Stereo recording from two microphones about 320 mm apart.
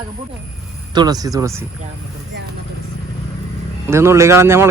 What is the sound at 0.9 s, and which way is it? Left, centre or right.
Speech, centre.